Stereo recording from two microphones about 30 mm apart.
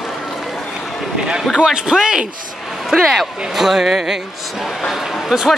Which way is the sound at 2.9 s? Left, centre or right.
Centre.